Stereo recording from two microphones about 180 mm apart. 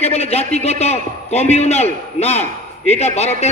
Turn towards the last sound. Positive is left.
turn(degrees=35)  # may be behind; listen again after turning